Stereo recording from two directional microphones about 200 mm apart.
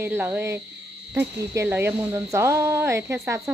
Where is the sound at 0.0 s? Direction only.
10° right (ahead or behind).